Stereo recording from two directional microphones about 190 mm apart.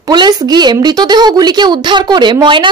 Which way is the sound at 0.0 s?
20° right (ahead or behind).